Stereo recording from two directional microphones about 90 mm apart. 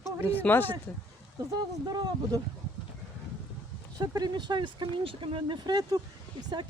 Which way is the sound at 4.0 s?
50° right (ahead or behind).